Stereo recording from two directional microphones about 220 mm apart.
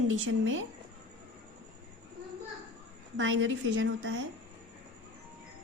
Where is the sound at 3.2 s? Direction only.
60° right (ahead or behind).